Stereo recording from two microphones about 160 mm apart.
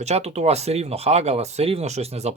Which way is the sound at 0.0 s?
40° right (ahead or behind).